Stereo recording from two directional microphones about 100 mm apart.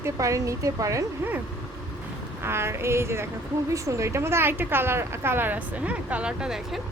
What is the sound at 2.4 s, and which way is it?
Speech, 25° right (ahead or behind).